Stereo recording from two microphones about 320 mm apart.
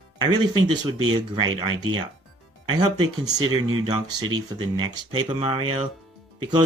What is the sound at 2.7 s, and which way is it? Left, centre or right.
Speech, centre.